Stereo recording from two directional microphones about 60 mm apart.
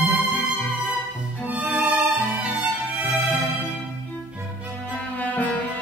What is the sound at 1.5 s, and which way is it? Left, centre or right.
Music, right.